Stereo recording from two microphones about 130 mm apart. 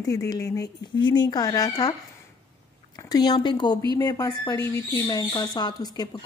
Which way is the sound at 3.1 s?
30° left (ahead or behind).